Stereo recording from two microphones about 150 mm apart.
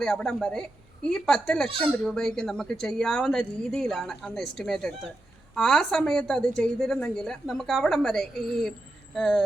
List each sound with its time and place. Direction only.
0.0 s a woman's voice: 5° left (ahead or behind)